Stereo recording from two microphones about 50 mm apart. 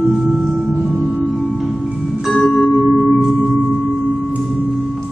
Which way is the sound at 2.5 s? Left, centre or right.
Centre.